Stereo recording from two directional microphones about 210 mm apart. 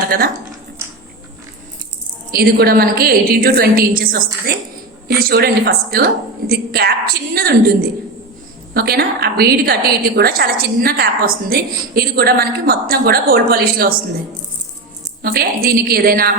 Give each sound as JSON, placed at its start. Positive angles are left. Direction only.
{"t": 2.3, "sound": "a woman's voice", "side_deg": -45}
{"t": 15.2, "sound": "a woman's voice", "side_deg": -45}